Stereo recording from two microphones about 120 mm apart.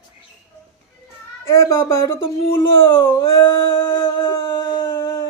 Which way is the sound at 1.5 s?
25° left (ahead or behind).